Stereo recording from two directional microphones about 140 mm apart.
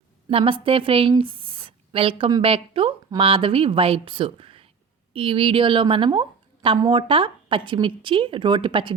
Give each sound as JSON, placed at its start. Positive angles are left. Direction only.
{"t": 0.3, "sound": "a woman's voice", "side_deg": -40}
{"t": 1.2, "sound": "a sound", "side_deg": -40}
{"t": 2.4, "sound": "a woman's voice", "side_deg": -40}